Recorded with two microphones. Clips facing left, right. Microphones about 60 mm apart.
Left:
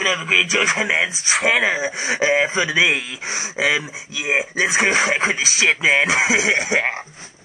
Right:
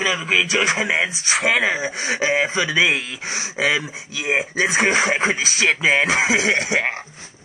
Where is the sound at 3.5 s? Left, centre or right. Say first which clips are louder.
Even; centre.